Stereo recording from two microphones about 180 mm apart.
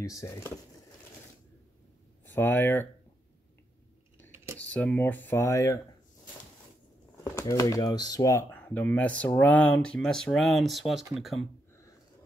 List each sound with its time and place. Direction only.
0.0 s speech: 15° left (ahead or behind)
2.2 s speech: 10° left (ahead or behind)
4.6 s speech: 5° left (ahead or behind)
7.2 s speech: 15° left (ahead or behind); by 11.4 s centre (ahead or behind)